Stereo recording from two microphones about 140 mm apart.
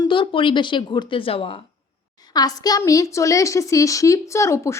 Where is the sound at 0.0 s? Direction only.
35° left (ahead or behind).